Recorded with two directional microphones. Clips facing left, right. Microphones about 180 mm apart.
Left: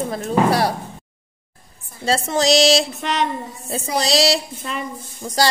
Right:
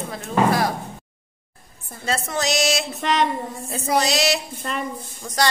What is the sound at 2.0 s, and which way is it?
Music, 30° left (ahead or behind).